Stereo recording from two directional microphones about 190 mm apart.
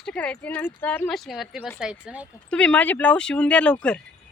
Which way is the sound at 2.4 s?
5° left (ahead or behind).